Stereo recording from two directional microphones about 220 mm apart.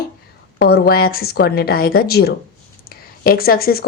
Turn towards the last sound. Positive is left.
turn(degrees=45)  # may be behind; listen again after turning